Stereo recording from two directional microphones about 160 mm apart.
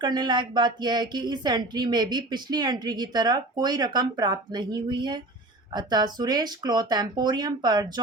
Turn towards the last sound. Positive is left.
turn(degrees=-25)  # may be behind; listen again after turning